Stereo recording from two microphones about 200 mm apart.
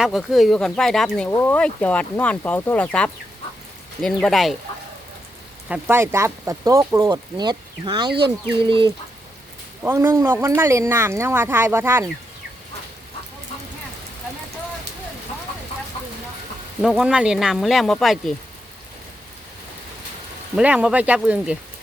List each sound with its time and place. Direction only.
0.0 s speech: centre (ahead or behind)
5.6 s speech: 10° right (ahead or behind)
16.8 s speech: 5° right (ahead or behind)
20.6 s speech: 5° right (ahead or behind)